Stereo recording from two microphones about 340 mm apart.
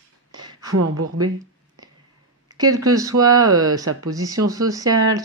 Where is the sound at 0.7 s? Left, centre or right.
Right.